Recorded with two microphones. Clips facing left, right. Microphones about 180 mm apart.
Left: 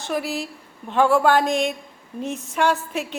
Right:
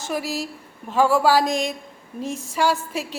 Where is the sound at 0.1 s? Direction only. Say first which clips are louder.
Left 1 dB; 5° right (ahead or behind).